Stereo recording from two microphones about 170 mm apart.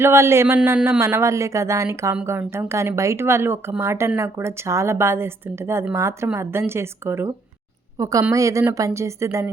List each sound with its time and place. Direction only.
0.0 s a woman's voice: 15° right (ahead or behind)